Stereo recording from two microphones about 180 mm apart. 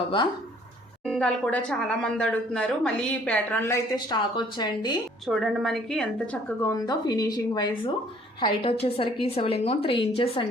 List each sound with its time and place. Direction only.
1.0 s a woman's voice: 5° left (ahead or behind)
3.9 s speech: 25° left (ahead or behind)
5.2 s a woman's voice: centre (ahead or behind)
6.5 s a woman's voice: 15° left (ahead or behind); by 10.4 s 30° left (ahead or behind)